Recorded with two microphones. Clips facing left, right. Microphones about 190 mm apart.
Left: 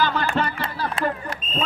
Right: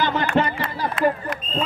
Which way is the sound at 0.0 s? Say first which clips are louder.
Right 2 dB; 20° right (ahead or behind).